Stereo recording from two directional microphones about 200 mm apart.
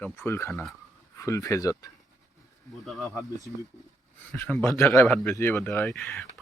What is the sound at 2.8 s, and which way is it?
Speech, centre (ahead or behind).